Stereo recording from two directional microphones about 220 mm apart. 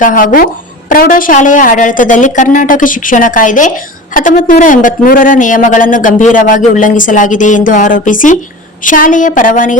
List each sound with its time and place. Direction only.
0.0 s a man's voice: 35° left (ahead or behind)